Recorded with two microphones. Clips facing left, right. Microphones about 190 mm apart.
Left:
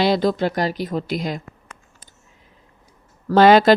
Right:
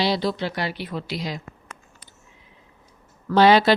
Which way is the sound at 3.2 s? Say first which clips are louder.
Left 4 dB; 50° left (ahead or behind).